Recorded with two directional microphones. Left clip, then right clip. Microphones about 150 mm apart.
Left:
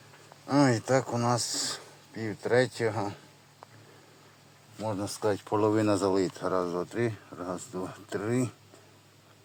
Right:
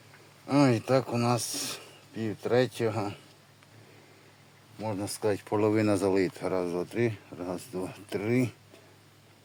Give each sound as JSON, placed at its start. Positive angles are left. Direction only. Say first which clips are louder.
{"t": 0.4, "sound": "speech", "louder": "even", "side_deg": -15}
{"t": 4.8, "sound": "speech", "louder": "left 1 dB", "side_deg": -5}